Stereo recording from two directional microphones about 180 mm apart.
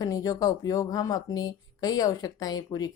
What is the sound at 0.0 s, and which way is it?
Speech, 20° left (ahead or behind).